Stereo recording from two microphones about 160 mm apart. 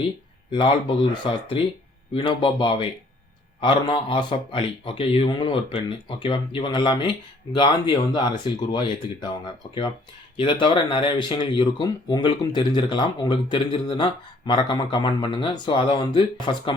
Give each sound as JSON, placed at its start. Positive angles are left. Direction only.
{"t": 0.5, "sound": "a man's voice", "side_deg": 30}
{"t": 10.3, "sound": "speech", "side_deg": 30}